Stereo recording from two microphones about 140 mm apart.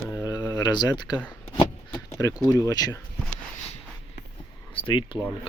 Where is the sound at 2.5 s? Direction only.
25° left (ahead or behind).